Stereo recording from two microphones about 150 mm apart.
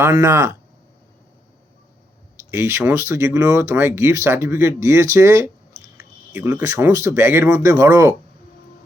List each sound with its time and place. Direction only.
0.0 s speech: 20° right (ahead or behind)
2.5 s speech: 15° right (ahead or behind)